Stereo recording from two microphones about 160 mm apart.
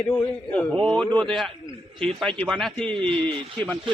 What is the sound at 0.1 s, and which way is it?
Speech, 10° left (ahead or behind).